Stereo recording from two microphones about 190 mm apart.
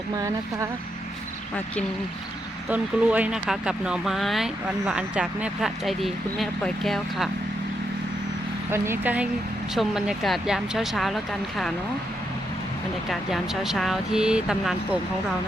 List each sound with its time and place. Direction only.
0.2 s speech: 15° right (ahead or behind)
2.6 s speech: 5° right (ahead or behind)
8.7 s speech: 15° right (ahead or behind)
13.1 s speech: centre (ahead or behind)